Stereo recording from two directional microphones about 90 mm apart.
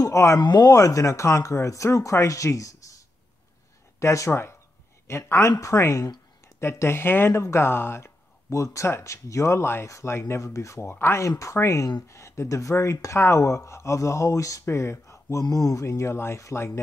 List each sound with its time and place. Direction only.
0.0 s speech: 35° left (ahead or behind)
0.4 s speech: 55° left (ahead or behind)
0.7 s speech: 35° left (ahead or behind)
4.0 s speech: 30° left (ahead or behind)